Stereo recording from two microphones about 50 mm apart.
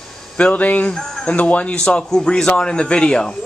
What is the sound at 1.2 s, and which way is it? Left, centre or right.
A man's voice, left.